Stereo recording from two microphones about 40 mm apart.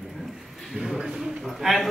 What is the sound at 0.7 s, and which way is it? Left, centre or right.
A man's voice, centre.